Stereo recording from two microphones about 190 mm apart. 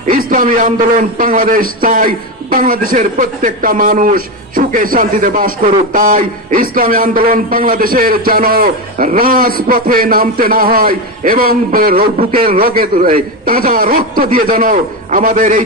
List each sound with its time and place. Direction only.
0.3 s a man's voice: 45° right (ahead or behind)